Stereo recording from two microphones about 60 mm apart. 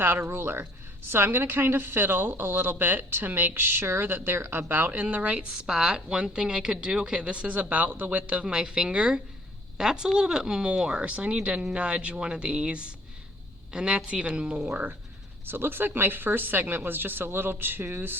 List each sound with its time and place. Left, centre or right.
0.0 s a woman's voice: right; by 14.8 s centre
15.4 s a woman's voice: right